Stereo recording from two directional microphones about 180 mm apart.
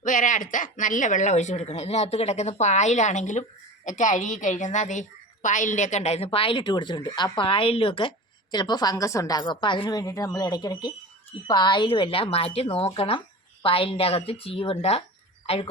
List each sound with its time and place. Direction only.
0.0 s a woman's voice: 45° left (ahead or behind)